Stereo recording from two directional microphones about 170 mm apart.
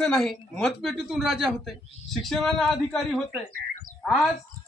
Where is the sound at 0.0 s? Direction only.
5° left (ahead or behind).